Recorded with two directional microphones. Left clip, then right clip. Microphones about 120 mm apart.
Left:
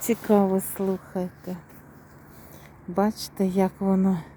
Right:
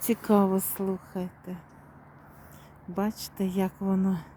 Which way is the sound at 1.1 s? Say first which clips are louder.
Left 6 dB; centre (ahead or behind).